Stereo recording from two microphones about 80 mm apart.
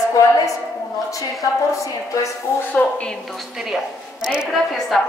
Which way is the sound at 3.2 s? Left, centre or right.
Centre.